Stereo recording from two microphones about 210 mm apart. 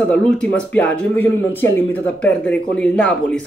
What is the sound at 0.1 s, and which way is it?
Speech, 5° left (ahead or behind).